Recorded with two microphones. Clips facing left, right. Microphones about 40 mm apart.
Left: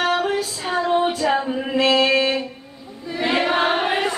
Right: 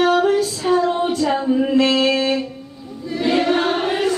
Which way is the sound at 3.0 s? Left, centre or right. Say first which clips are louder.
Right 3 dB; left.